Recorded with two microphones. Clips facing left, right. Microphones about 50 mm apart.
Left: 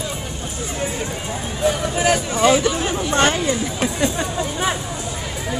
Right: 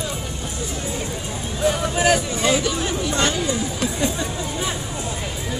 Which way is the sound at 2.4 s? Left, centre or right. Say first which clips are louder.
Left 4 dB; centre.